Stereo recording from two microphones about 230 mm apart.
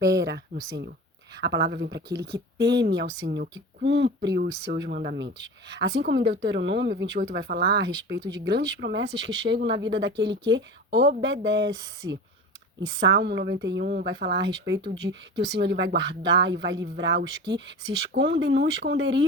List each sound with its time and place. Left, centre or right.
0.2 s speech: right
2.0 s speech: centre
2.3 s speech: right
4.9 s speech: right